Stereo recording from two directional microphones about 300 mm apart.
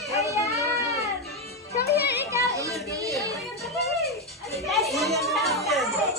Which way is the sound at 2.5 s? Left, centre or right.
Centre.